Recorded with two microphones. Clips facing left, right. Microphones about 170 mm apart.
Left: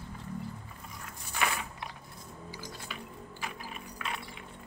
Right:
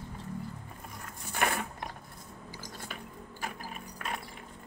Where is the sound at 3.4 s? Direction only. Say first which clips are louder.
Right 2 dB; 45° right (ahead or behind).